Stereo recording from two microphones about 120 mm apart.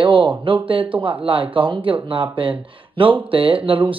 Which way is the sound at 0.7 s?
45° right (ahead or behind).